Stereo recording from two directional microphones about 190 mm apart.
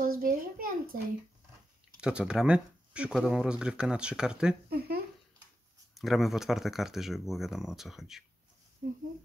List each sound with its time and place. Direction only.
0.0 s a sound: 50° right (ahead or behind)
2.0 s speech: 5° right (ahead or behind)
4.6 s speech: 55° right (ahead or behind)
5.9 s speech: centre (ahead or behind)